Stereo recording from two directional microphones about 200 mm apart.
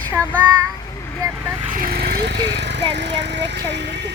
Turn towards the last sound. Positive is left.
turn(degrees=-60)  # may be behind; listen again after turning